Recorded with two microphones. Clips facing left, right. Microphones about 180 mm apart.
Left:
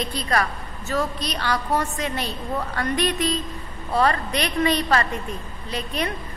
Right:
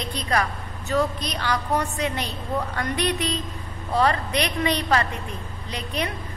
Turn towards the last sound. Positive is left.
turn(degrees=-15)  # may be behind; listen again after turning